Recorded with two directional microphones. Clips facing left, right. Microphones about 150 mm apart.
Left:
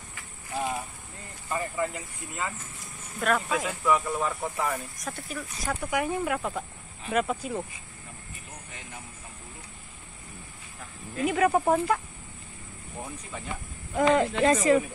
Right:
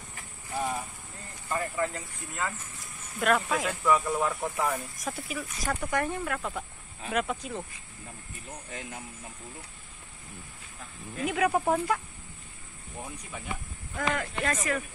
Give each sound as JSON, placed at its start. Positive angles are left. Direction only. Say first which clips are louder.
{"t": 0.6, "sound": "vehicle", "louder": "left 1 dB", "side_deg": 5}
{"t": 1.5, "sound": "speech", "louder": "even", "side_deg": 5}
{"t": 5.8, "sound": "speech", "louder": "left 3 dB", "side_deg": 5}
{"t": 11.2, "sound": "speech", "louder": "left 3 dB", "side_deg": 0}
{"t": 13.9, "sound": "speech", "louder": "left 9 dB", "side_deg": 25}